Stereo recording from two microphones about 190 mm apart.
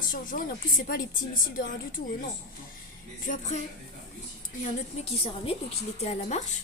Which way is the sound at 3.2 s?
40° left (ahead or behind).